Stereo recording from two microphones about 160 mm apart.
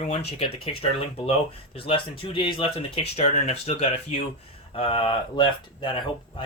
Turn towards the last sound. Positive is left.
turn(degrees=30)  # may be behind; listen again after turning